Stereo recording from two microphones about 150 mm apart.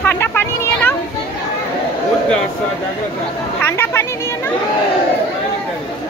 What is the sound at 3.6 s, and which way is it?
Speech, 15° left (ahead or behind).